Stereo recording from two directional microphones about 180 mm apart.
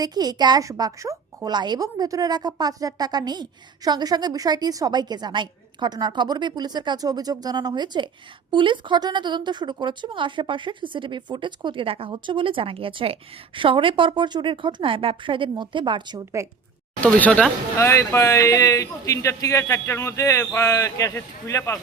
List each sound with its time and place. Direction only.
0.0 s a woman's voice: 20° right (ahead or behind)
17.0 s speech: 10° left (ahead or behind)